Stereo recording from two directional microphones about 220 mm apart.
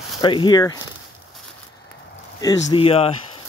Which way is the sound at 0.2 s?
20° left (ahead or behind).